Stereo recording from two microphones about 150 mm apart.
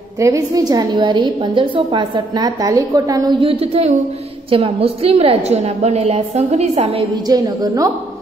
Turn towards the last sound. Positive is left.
turn(degrees=-25)  # may be behind; listen again after turning